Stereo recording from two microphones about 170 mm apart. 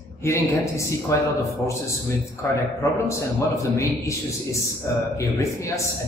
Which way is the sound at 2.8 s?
15° left (ahead or behind).